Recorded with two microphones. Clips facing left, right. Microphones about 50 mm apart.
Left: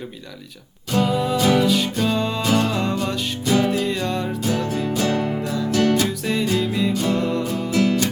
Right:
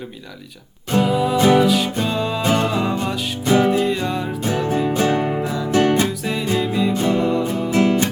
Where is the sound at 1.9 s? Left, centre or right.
Centre.